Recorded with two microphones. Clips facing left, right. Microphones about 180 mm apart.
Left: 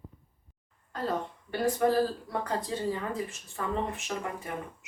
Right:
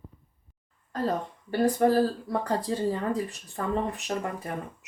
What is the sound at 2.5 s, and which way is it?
Speech, 35° right (ahead or behind).